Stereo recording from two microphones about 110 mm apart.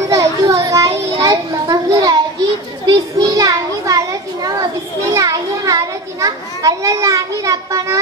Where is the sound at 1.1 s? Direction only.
35° right (ahead or behind).